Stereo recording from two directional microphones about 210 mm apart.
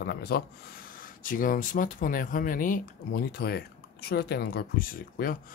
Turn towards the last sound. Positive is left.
turn(degrees=40)  # may be behind; listen again after turning